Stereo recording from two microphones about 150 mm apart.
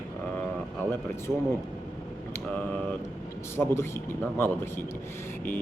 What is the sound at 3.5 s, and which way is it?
Speech, 15° left (ahead or behind).